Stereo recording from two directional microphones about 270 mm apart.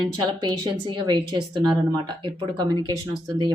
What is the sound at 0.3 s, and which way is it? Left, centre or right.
Speech, centre.